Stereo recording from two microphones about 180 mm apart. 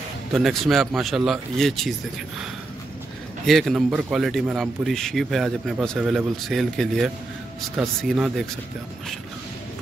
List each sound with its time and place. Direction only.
0.3 s a man's voice: centre (ahead or behind)
3.4 s a man's voice: centre (ahead or behind)